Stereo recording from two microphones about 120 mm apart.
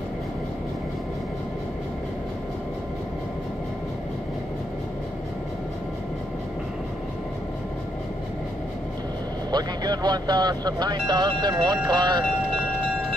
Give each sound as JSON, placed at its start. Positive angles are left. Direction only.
{"t": 9.5, "sound": "speech", "side_deg": -35}